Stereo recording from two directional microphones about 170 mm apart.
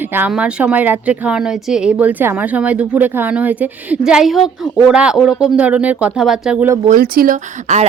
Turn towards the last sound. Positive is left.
turn(degrees=-45)  # may be behind; listen again after turning